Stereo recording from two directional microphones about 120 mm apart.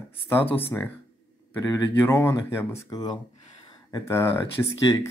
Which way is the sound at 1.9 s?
20° left (ahead or behind).